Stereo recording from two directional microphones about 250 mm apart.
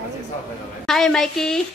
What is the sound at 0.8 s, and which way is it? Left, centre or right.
Speech, centre.